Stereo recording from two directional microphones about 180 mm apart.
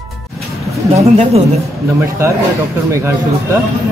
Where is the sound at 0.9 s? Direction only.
35° right (ahead or behind).